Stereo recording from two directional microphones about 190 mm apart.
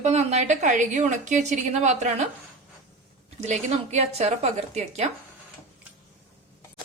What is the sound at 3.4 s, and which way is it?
A woman's voice, 35° right (ahead or behind).